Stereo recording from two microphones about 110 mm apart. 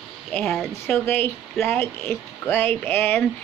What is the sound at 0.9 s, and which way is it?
Speech, 20° left (ahead or behind).